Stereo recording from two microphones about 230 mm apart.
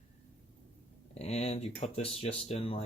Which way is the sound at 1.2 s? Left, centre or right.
Left.